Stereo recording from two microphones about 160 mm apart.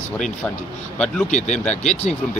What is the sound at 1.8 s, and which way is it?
Speech, 45° left (ahead or behind).